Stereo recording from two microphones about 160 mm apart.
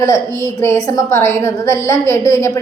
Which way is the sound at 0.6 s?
15° left (ahead or behind).